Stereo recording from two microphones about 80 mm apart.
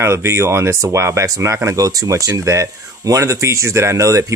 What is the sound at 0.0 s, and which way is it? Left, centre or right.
Speech, right.